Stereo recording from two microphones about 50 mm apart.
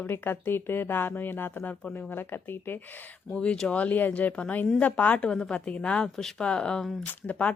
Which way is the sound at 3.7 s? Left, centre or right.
Left.